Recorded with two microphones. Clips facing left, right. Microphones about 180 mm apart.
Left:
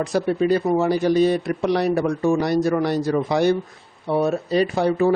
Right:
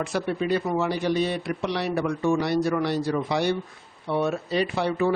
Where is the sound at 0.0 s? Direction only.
40° left (ahead or behind).